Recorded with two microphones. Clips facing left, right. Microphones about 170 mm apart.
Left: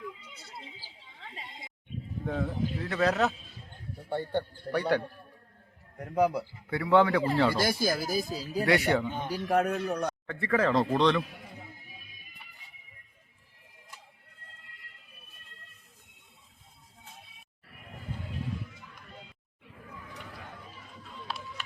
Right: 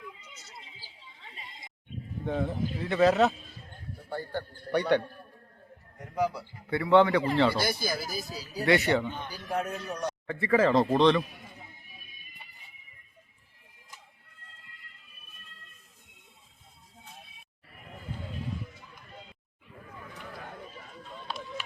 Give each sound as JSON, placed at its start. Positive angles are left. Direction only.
{"t": 2.2, "sound": "speech", "side_deg": 0}
{"t": 4.1, "sound": "a man's voice", "side_deg": 25}
{"t": 4.7, "sound": "speech", "side_deg": 5}
{"t": 6.7, "sound": "a man's voice", "side_deg": 10}
{"t": 7.6, "sound": "speech", "side_deg": 50}
{"t": 8.6, "sound": "a man's voice", "side_deg": 10}
{"t": 9.3, "sound": "speech", "side_deg": 65}
{"t": 10.2, "sound": "speech", "side_deg": 0}